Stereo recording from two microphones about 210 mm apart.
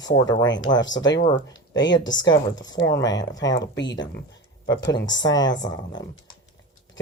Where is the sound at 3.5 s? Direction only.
60° left (ahead or behind).